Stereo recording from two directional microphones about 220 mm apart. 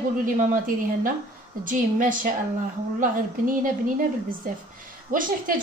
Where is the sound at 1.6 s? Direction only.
40° right (ahead or behind).